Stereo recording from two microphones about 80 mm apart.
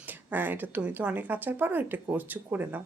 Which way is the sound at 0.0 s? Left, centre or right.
Right.